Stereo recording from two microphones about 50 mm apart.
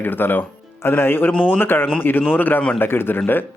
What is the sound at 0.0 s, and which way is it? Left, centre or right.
Speech, left.